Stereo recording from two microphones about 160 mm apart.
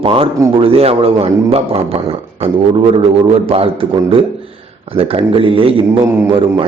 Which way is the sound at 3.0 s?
35° right (ahead or behind).